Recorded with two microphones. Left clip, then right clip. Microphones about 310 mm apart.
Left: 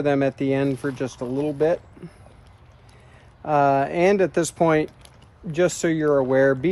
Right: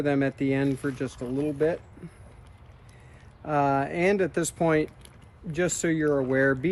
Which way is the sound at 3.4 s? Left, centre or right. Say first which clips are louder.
Left 6 dB; left.